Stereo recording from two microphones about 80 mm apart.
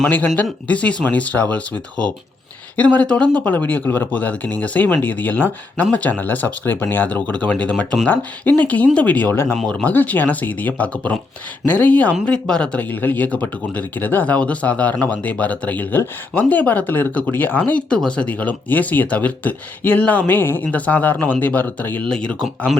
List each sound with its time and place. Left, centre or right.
0.0 s speech: left
9.6 s speech: centre
9.9 s speech: left
22.1 s speech: centre